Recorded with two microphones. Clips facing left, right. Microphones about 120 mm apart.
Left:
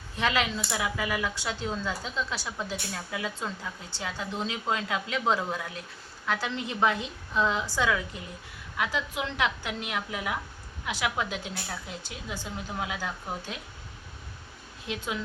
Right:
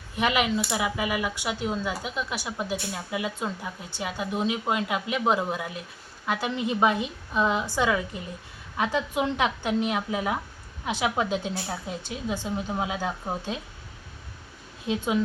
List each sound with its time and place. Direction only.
0.2 s a woman's voice: 15° right (ahead or behind)
14.8 s a woman's voice: 25° right (ahead or behind)